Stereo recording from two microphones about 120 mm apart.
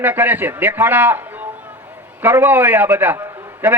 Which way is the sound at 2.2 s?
20° right (ahead or behind).